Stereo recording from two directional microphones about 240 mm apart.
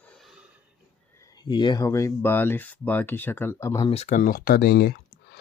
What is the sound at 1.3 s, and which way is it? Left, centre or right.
Speech, centre.